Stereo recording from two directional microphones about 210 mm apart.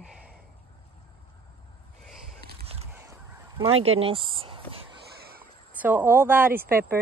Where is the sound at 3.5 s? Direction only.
25° right (ahead or behind).